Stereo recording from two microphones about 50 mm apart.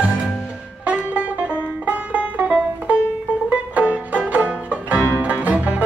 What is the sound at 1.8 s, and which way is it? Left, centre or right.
Music, right.